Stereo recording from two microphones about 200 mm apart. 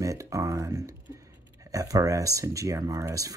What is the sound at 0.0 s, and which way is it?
Speech, 15° right (ahead or behind).